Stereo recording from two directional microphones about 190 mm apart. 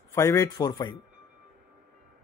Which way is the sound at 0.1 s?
15° left (ahead or behind).